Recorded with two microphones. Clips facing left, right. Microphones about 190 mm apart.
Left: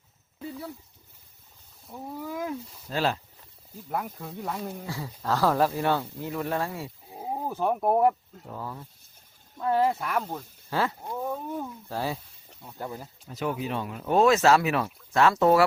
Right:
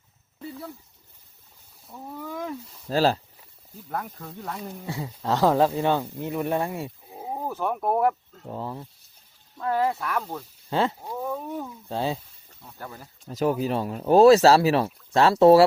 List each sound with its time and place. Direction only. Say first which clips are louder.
0.3 s a sound: even; centre (ahead or behind)
1.9 s speech: left 1 dB; 5° left (ahead or behind)
2.9 s speech: right 6 dB; 35° right (ahead or behind)
3.8 s speech: left 1 dB; 10° left (ahead or behind)
4.9 s speech: right 4 dB; 20° right (ahead or behind)
7.5 s speech: left 2 dB; 10° left (ahead or behind)
8.4 s speech: right 4 dB; 25° right (ahead or behind)
9.6 s speech: left 1 dB; 10° left (ahead or behind)
10.7 s speech: right 3 dB; 25° right (ahead or behind)
11.0 s speech: right 1 dB; 5° right (ahead or behind)
11.9 s speech: right 4 dB; 20° right (ahead or behind)
12.6 s speech: left 4 dB; 15° left (ahead or behind)
13.3 s speech: right 6 dB; 35° right (ahead or behind)